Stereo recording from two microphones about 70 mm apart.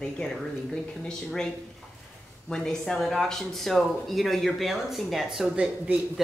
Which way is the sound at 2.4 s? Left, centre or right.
Centre.